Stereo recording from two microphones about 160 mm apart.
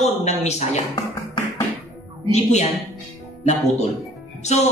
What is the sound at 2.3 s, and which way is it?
Speech, 45° left (ahead or behind).